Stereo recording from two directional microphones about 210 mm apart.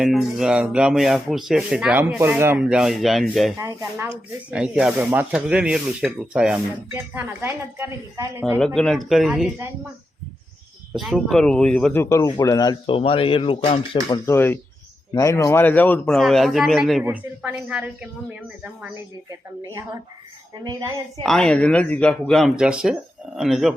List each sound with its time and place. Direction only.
0.0 s speech: centre (ahead or behind)
3.6 s speech: 15° right (ahead or behind)
8.5 s speech: 5° left (ahead or behind)
10.9 s speech: centre (ahead or behind); by 14.2 s 25° left (ahead or behind)
14.3 s speech: 10° left (ahead or behind); by 18.1 s 5° right (ahead or behind)
21.2 s speech: 5° left (ahead or behind)